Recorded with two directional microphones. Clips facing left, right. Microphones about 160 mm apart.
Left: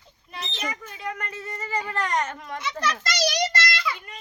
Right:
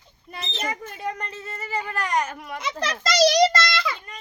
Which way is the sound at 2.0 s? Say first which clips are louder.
Right 2 dB; 5° right (ahead or behind).